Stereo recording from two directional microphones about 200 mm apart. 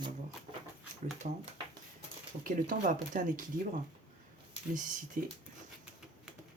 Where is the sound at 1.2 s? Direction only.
40° right (ahead or behind).